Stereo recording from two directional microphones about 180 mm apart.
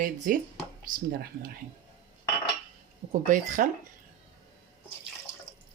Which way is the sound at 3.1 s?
45° right (ahead or behind).